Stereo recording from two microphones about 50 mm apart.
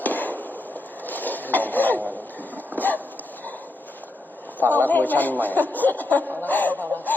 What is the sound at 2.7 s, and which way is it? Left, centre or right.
Dog, left.